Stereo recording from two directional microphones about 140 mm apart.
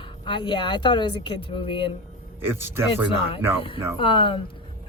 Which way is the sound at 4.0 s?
35° left (ahead or behind).